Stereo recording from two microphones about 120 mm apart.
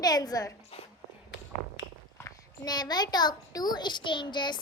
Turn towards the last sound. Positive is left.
turn(degrees=40)  # may be behind; listen again after turning